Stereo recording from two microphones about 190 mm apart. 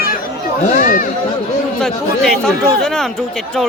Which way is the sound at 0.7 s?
45° left (ahead or behind).